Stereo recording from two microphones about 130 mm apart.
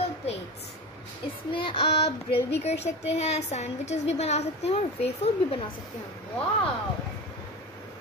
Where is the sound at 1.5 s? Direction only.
40° left (ahead or behind).